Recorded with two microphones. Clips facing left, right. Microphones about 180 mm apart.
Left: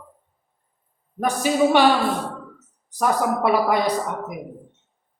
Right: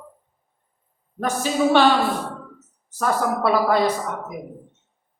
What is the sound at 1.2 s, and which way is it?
Speech, 15° left (ahead or behind).